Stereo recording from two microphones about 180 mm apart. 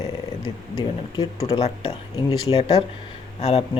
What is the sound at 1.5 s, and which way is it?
Speech, 35° left (ahead or behind).